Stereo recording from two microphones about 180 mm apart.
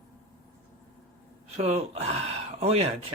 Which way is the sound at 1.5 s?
35° right (ahead or behind).